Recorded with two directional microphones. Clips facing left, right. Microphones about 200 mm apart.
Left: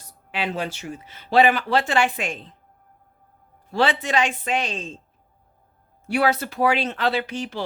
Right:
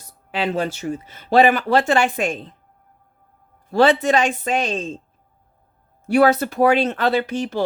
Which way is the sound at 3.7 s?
45° right (ahead or behind).